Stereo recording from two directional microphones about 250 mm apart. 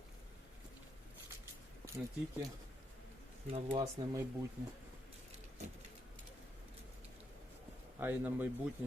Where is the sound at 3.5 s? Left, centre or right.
Centre.